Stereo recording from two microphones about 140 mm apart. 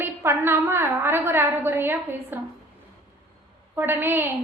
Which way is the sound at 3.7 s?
15° right (ahead or behind).